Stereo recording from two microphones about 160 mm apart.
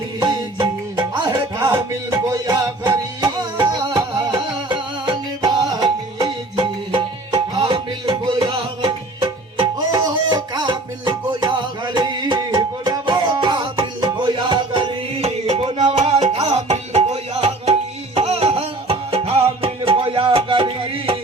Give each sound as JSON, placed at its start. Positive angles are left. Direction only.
{"t": 0.2, "sound": "music", "side_deg": -25}